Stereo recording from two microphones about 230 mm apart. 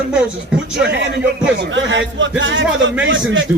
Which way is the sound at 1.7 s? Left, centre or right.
Right.